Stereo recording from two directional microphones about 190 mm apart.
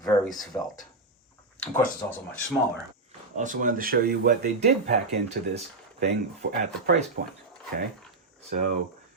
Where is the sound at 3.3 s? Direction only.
45° right (ahead or behind).